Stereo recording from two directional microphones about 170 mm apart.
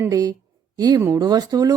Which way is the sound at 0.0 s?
20° right (ahead or behind).